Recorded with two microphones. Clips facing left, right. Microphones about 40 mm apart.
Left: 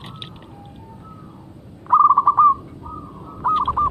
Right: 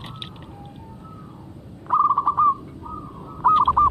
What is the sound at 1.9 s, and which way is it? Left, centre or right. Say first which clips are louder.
Owl: left 5 dB; centre.